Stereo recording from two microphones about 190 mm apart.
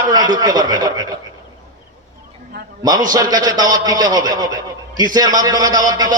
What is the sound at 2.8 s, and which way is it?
A man's voice, 20° right (ahead or behind).